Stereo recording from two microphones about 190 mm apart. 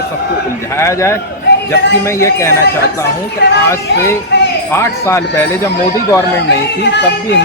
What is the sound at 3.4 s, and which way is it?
Speech, 65° left (ahead or behind).